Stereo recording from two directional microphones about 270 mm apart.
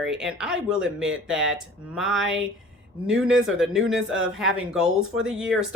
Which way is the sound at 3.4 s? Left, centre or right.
Centre.